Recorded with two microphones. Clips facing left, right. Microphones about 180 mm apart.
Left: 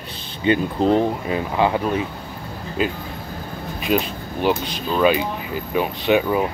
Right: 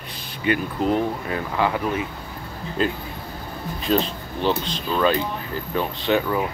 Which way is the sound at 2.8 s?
10° left (ahead or behind).